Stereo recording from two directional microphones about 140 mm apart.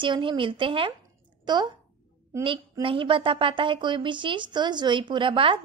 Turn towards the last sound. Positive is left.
turn(degrees=-35)  # may be behind; listen again after turning